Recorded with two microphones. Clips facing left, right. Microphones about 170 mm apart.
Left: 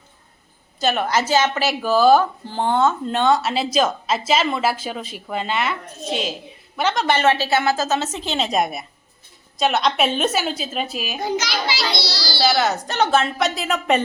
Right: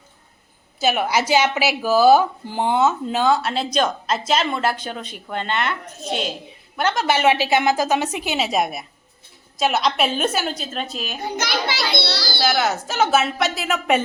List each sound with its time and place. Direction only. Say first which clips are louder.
0.8 s a woman's voice: even; 10° right (ahead or behind); by 11.2 s 10° left (ahead or behind)
11.3 s a child's voice: even; 55° right (ahead or behind)
12.4 s speech: left 2 dB; centre (ahead or behind)